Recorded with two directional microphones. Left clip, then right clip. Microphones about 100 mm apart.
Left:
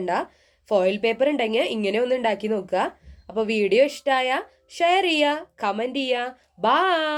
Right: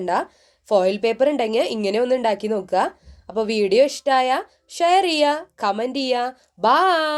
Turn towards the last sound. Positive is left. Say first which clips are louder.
# right 3 dB
turn(degrees=-20)  # may be behind; listen again after turning